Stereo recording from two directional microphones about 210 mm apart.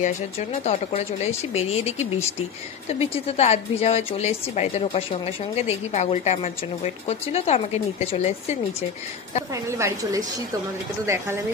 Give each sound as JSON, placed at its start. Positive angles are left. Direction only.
{"t": 0.0, "sound": "a woman's voice", "side_deg": 30}
{"t": 9.5, "sound": "a woman's voice", "side_deg": -15}